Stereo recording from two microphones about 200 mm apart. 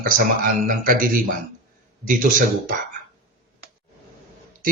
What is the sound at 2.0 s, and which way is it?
Speech, 45° right (ahead or behind).